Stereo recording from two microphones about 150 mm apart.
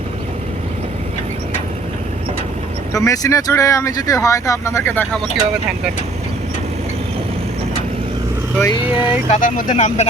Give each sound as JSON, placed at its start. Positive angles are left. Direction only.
{"t": 2.9, "sound": "speech", "side_deg": 20}
{"t": 8.6, "sound": "speech", "side_deg": 30}
{"t": 9.3, "sound": "speech", "side_deg": 60}